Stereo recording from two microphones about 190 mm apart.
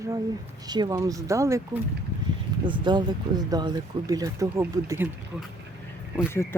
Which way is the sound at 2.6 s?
25° right (ahead or behind).